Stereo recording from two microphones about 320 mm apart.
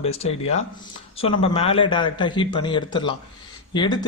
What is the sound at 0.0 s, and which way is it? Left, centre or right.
Speech, centre.